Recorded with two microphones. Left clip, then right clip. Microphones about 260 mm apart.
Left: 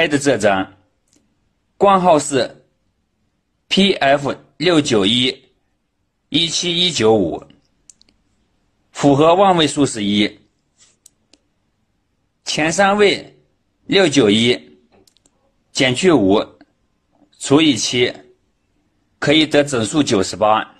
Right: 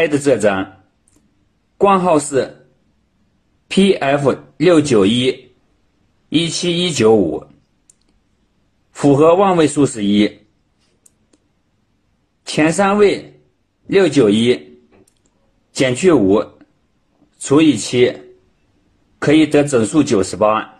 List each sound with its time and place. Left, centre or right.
0.0 s speech: left
1.8 s speech: left
3.7 s speech: left
6.3 s speech: left
8.9 s speech: left
12.4 s speech: left
15.8 s speech: left
17.5 s speech: left
19.2 s speech: left